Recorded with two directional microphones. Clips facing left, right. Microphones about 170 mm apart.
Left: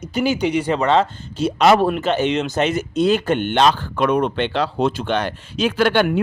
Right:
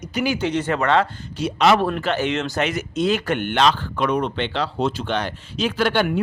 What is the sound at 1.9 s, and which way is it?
Speech, 20° left (ahead or behind).